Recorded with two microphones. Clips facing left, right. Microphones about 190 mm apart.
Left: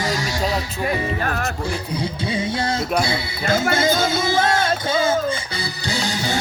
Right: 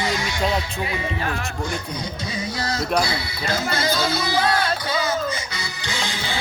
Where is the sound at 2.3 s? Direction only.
25° left (ahead or behind).